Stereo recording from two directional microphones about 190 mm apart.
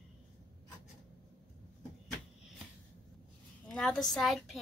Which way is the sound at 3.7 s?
5° left (ahead or behind).